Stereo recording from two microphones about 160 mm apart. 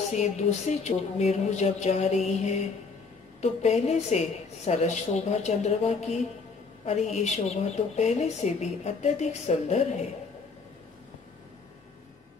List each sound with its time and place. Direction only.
0.1 s speech: 45° left (ahead or behind)